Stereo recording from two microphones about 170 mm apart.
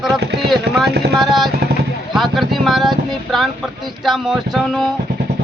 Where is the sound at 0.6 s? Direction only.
75° right (ahead or behind).